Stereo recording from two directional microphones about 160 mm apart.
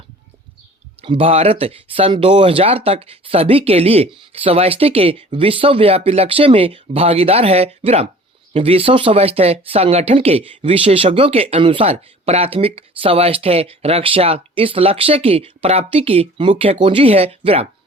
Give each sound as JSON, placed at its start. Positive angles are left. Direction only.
{"t": 1.0, "sound": "speech", "side_deg": -35}